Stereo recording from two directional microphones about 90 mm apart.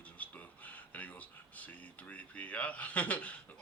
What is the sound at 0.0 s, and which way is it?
Speech, 15° left (ahead or behind).